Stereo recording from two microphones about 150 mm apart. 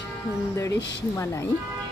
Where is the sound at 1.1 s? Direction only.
20° left (ahead or behind).